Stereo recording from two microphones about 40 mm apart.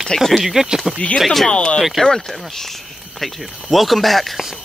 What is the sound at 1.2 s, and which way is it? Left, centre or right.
Speech, centre.